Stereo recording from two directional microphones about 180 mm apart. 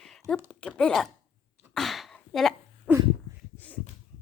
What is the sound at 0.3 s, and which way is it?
Speech, 5° left (ahead or behind).